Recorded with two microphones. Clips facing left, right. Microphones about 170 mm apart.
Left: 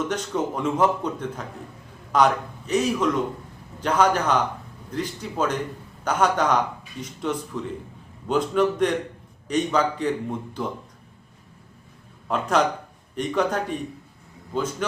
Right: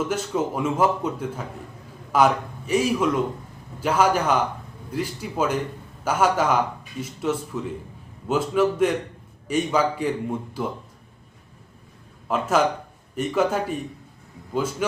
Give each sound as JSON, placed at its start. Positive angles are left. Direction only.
{"t": 0.1, "sound": "a man's voice", "side_deg": -5}
{"t": 12.3, "sound": "a man's voice", "side_deg": -5}